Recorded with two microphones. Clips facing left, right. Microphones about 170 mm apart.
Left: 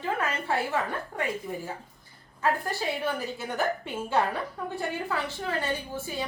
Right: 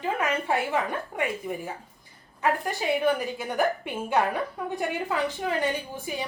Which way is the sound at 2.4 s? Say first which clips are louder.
Right 1 dB; 15° right (ahead or behind).